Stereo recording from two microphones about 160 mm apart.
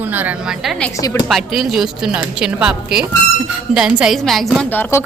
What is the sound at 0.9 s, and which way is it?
Speech, 20° left (ahead or behind).